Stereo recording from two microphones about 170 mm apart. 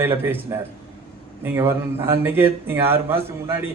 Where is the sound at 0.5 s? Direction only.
15° right (ahead or behind).